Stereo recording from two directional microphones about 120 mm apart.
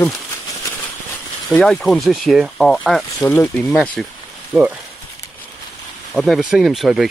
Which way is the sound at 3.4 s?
15° left (ahead or behind).